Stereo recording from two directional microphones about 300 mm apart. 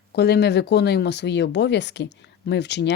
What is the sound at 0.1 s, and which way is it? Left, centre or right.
Speech, left.